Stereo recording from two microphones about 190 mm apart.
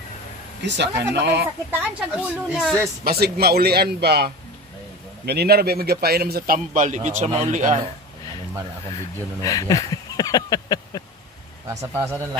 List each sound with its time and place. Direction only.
0.6 s a man's voice: 65° right (ahead or behind)
1.7 s a woman's voice: 10° right (ahead or behind)
3.0 s a man's voice: 55° right (ahead or behind); by 7.9 s 35° right (ahead or behind)
9.4 s a sound: 20° left (ahead or behind)
11.6 s a woman's voice: 15° right (ahead or behind)